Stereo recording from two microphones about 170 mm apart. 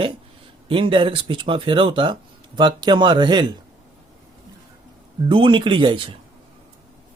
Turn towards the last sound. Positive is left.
turn(degrees=-30)  # may be behind; listen again after turning